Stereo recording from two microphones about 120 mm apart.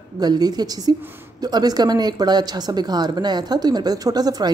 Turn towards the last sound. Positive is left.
turn(degrees=-35)  # may be behind; listen again after turning